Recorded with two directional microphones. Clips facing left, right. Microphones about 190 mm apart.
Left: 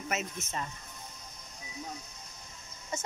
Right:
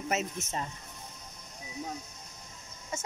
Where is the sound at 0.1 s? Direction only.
30° right (ahead or behind).